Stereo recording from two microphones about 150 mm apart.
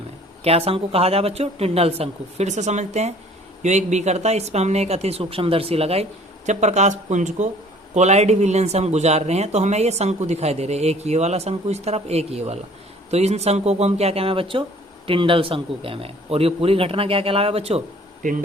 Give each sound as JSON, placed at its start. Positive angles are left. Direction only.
{"t": 0.4, "sound": "a man's voice", "side_deg": -40}